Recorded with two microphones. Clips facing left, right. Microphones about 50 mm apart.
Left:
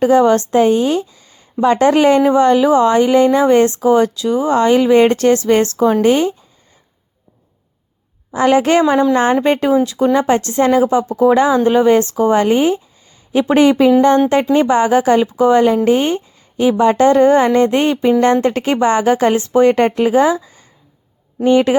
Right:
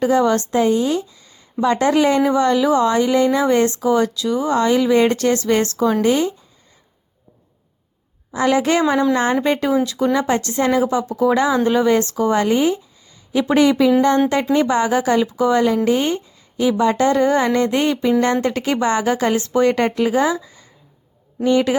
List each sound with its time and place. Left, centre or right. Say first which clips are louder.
0.0 s speech: left 5 dB; left
8.3 s speech: left 5 dB; left
9.8 s speech: left 4 dB; left
21.3 s speech: left 4 dB; left